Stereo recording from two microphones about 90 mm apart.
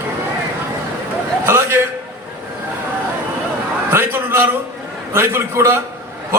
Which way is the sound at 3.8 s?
25° right (ahead or behind).